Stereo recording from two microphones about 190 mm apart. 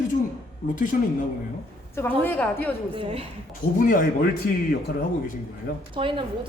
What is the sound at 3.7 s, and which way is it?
A man's voice, 45° left (ahead or behind).